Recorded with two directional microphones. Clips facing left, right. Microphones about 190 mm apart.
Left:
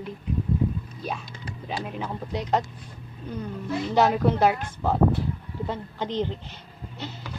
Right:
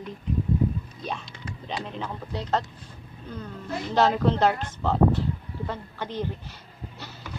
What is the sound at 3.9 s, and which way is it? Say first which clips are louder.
A woman's voice: even; 10° left (ahead or behind).